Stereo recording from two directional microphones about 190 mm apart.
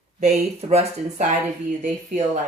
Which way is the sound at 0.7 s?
35° right (ahead or behind).